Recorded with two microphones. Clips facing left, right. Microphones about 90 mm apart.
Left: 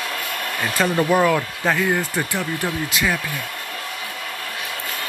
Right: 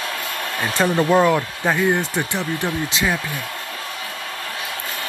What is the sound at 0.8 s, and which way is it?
Speech, 20° right (ahead or behind).